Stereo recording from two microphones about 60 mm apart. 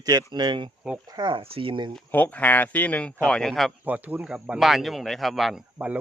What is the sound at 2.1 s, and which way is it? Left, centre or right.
Speech, left.